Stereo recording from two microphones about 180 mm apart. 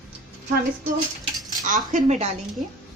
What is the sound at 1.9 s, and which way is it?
Speech, 40° right (ahead or behind).